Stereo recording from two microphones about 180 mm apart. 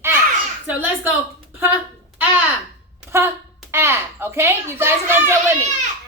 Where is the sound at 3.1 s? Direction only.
15° right (ahead or behind).